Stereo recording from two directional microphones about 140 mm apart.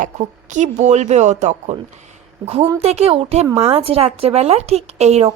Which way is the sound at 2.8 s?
50° right (ahead or behind).